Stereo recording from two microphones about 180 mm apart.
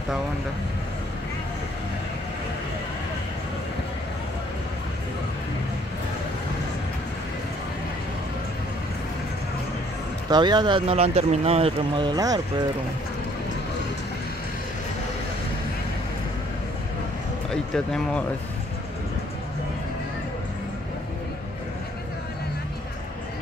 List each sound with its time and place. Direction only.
10.3 s speech: 25° right (ahead or behind)
17.5 s speech: 5° left (ahead or behind)